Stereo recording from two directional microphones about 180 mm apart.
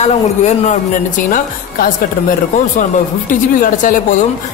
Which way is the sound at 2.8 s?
45° left (ahead or behind).